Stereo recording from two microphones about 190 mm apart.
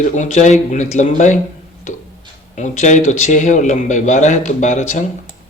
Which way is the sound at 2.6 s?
40° left (ahead or behind).